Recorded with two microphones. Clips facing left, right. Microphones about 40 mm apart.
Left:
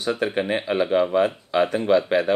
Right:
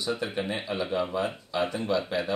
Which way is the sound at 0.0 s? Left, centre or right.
Left.